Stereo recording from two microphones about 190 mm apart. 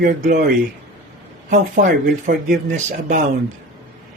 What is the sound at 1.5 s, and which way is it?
Speech, 45° right (ahead or behind).